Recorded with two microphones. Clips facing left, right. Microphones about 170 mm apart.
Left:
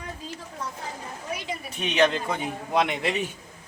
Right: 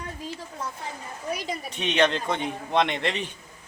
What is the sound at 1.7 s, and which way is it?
A man's voice, 5° left (ahead or behind).